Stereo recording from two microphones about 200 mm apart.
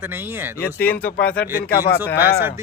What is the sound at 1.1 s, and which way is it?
Speech, 50° left (ahead or behind).